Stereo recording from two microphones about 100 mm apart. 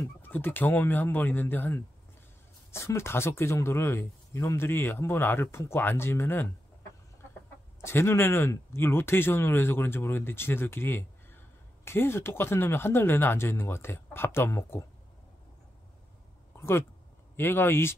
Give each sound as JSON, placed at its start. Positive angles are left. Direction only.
{"t": 0.0, "sound": "speech", "side_deg": 20}
{"t": 7.8, "sound": "speech", "side_deg": 25}
{"t": 16.5, "sound": "a sound", "side_deg": 25}
{"t": 17.4, "sound": "speech", "side_deg": 20}